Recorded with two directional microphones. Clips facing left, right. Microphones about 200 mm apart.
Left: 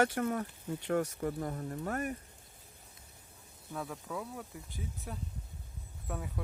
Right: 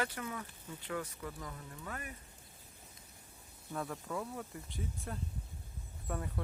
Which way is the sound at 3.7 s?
Centre (ahead or behind).